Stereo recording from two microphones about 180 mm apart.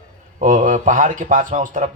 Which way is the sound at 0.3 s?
45° right (ahead or behind).